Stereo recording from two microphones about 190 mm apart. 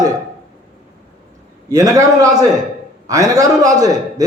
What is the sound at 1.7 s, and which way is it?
A man's voice, 20° right (ahead or behind).